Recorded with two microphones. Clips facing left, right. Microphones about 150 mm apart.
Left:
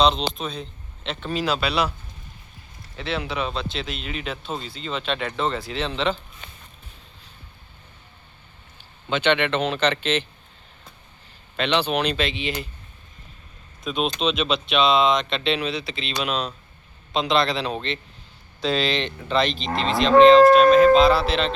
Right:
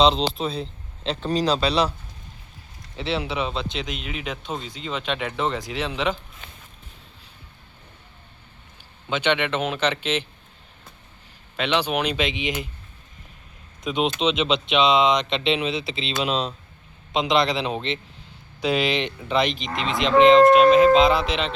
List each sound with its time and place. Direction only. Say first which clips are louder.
0.0 s a man's voice: right 2 dB; 25° right (ahead or behind)
3.0 s speech: right 1 dB; 25° right (ahead or behind)
4.6 s cattle: even; 10° right (ahead or behind)
9.0 s cattle: left 2 dB; 10° right (ahead or behind)
11.5 s cattle: left 1 dB; 10° right (ahead or behind)
13.8 s speech: right 1 dB; 20° right (ahead or behind)
18.6 s cattle: right 1 dB; 15° right (ahead or behind)